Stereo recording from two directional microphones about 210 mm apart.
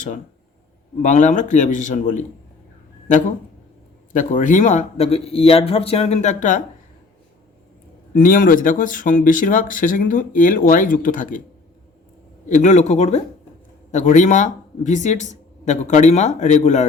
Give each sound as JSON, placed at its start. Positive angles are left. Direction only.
{"t": 1.0, "sound": "speech", "side_deg": 35}
{"t": 8.1, "sound": "speech", "side_deg": 40}
{"t": 12.5, "sound": "speech", "side_deg": 35}